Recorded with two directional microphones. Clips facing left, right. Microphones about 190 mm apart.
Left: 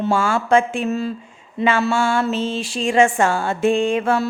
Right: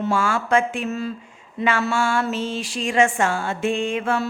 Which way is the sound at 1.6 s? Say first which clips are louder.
Left 3 dB; 25° left (ahead or behind).